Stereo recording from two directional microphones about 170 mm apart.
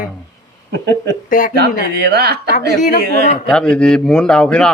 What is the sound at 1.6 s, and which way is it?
Speech, 75° right (ahead or behind).